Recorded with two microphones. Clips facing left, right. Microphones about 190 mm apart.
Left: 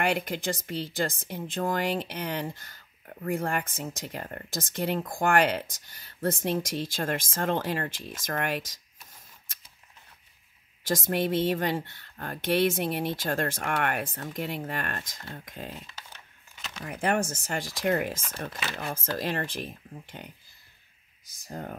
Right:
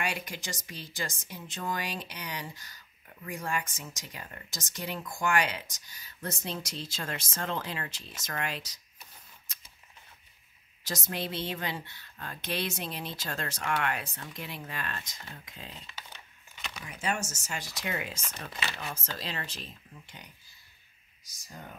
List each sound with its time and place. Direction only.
0.0 s speech: 55° left (ahead or behind)
10.9 s speech: 50° left (ahead or behind)
16.8 s speech: 55° left (ahead or behind)
21.5 s speech: 55° left (ahead or behind)